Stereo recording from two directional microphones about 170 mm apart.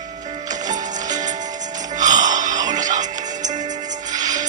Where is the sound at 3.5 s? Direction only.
25° right (ahead or behind).